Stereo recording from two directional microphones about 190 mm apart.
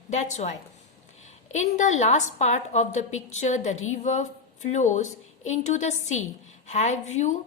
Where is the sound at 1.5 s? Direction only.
40° left (ahead or behind).